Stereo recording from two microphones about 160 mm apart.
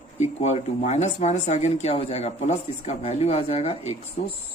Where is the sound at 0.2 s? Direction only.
45° left (ahead or behind).